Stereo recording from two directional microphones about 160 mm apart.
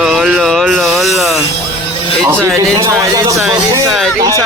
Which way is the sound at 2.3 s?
15° right (ahead or behind).